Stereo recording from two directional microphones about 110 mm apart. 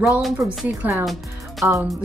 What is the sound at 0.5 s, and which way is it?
A woman's voice, 10° right (ahead or behind).